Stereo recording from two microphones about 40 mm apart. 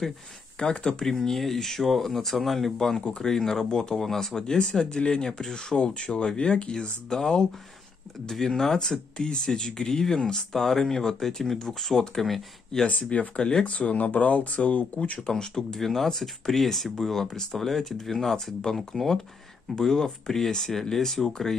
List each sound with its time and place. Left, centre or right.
0.6 s speech: centre
1.1 s speech: centre; by 6.9 s left
7.1 s speech: centre
12.8 s speech: left
13.4 s speech: left
13.7 s speech: left
15.2 s speech: centre
15.8 s speech: centre